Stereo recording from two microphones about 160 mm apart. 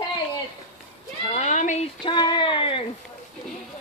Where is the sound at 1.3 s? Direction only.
50° left (ahead or behind).